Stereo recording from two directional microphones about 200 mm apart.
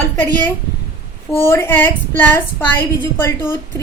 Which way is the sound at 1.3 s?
10° left (ahead or behind).